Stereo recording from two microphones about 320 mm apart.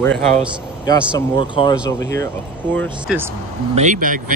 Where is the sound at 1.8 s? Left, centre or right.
Centre.